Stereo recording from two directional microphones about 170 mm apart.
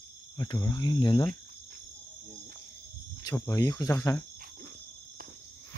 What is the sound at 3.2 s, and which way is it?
Cricket, 20° left (ahead or behind).